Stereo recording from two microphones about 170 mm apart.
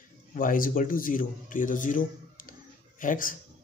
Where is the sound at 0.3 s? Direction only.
55° left (ahead or behind).